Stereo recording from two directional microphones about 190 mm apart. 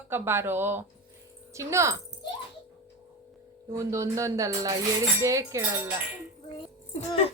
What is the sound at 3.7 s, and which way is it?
A woman's voice, 15° right (ahead or behind).